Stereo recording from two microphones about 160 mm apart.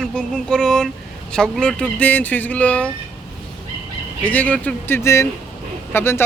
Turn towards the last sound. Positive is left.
turn(degrees=15)  # may be behind; listen again after turning